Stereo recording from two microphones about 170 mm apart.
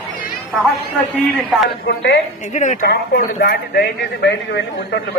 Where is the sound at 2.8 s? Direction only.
65° left (ahead or behind); by 5.0 s 90° left.